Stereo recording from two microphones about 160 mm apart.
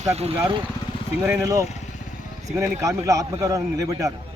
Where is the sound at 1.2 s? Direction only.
15° right (ahead or behind).